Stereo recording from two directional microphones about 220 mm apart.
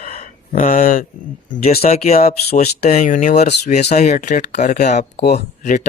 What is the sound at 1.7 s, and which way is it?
Speech, 30° left (ahead or behind).